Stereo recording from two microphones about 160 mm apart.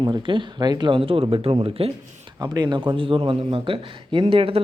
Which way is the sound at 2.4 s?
25° right (ahead or behind).